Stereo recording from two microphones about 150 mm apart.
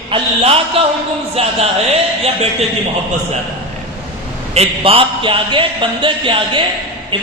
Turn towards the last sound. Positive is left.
turn(degrees=-35)  # may be behind; listen again after turning